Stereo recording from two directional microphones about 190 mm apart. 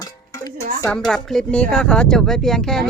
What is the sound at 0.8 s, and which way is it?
Speech, 5° left (ahead or behind).